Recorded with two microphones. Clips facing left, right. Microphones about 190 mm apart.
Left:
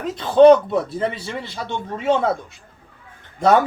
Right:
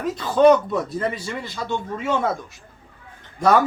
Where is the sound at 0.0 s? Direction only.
25° left (ahead or behind).